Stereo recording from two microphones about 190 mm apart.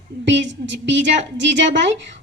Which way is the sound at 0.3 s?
70° right (ahead or behind).